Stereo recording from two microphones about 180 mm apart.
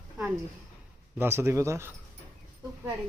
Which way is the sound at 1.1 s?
15° right (ahead or behind).